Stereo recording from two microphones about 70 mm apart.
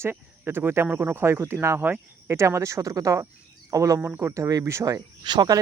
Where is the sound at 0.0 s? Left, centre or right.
Right.